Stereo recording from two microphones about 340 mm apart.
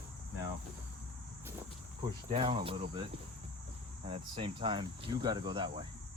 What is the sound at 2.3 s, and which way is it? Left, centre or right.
Speech, centre.